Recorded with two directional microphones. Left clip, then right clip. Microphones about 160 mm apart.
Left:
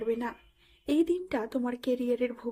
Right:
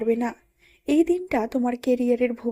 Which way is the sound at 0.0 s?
35° right (ahead or behind).